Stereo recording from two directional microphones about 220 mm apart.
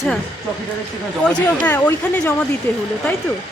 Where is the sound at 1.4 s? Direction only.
5° left (ahead or behind).